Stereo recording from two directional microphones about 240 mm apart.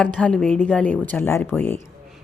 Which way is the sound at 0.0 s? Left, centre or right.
Centre.